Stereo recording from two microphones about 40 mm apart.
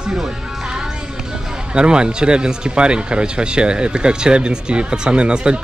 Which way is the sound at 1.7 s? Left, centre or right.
Right.